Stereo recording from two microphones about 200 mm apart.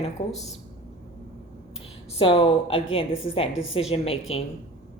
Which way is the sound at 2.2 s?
25° left (ahead or behind).